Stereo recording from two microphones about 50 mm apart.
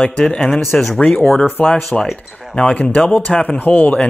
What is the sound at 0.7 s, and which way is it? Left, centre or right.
Speech, centre.